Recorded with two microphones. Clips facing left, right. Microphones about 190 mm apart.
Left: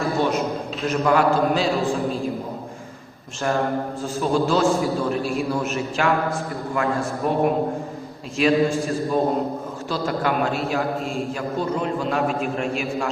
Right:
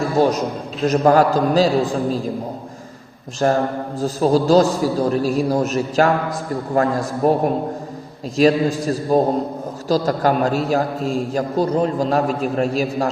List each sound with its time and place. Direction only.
0.2 s a man's voice: 40° right (ahead or behind)
3.4 s a man's voice: 40° right (ahead or behind)
8.4 s a man's voice: 40° right (ahead or behind)